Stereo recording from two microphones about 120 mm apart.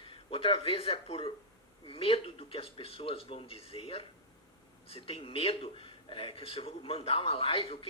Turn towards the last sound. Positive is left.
turn(degrees=50)  # may be behind; listen again after turning